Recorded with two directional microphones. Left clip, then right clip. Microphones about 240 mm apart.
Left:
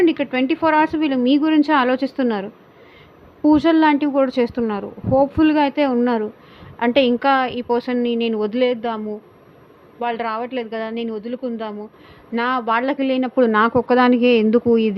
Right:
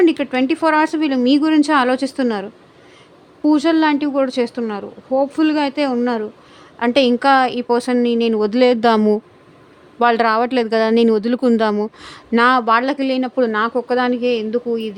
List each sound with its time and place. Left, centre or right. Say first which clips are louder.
0.0 s a woman's voice: right 2 dB; centre